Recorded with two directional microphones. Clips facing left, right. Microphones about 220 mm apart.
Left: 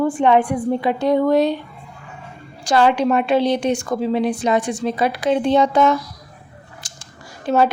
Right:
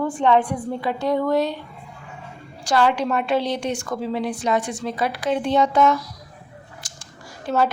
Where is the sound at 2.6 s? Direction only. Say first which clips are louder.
Left 4 dB; 20° left (ahead or behind).